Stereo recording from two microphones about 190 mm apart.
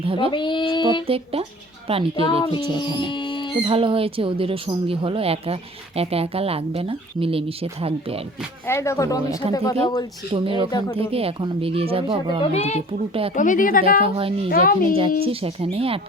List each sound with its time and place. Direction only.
0.0 s speech: 30° right (ahead or behind)
0.3 s speech: 25° left (ahead or behind)
1.0 s speech: 30° right (ahead or behind)
2.2 s music: 25° left (ahead or behind)
3.6 s speech: 30° right (ahead or behind)
8.6 s speech: 15° left (ahead or behind)
10.3 s speech: 30° right (ahead or behind)
10.7 s speech: 20° left (ahead or behind)
11.1 s speech: 30° right (ahead or behind)
12.4 s a child's voice: 35° left (ahead or behind)
14.0 s speech: 30° right (ahead or behind)
14.5 s speech: 50° left (ahead or behind)
15.2 s speech: 30° right (ahead or behind)